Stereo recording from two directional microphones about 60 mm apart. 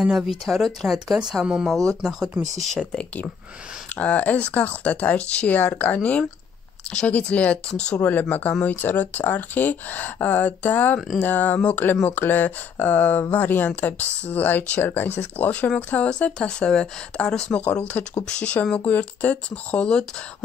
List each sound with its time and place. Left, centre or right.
0.0 s speech: centre
4.0 s speech: left
8.0 s speech: left
15.9 s speech: centre